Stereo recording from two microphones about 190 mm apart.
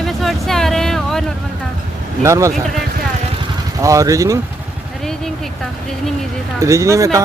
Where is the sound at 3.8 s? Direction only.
15° right (ahead or behind).